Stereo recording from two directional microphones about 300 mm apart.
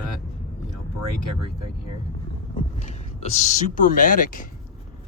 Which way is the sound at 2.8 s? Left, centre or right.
Left.